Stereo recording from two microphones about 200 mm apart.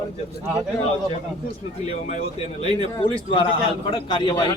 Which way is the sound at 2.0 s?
35° left (ahead or behind).